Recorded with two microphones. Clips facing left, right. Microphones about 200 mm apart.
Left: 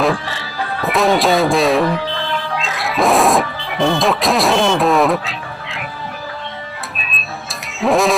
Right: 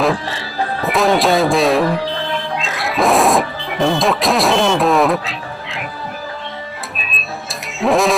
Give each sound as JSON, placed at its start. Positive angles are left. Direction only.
{"t": 0.0, "sound": "music", "side_deg": 0}
{"t": 0.9, "sound": "speech", "side_deg": 0}
{"t": 2.6, "sound": "music", "side_deg": 0}
{"t": 6.9, "sound": "music", "side_deg": 0}